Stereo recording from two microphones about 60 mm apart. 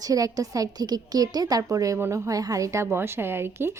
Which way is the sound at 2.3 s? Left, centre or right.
Right.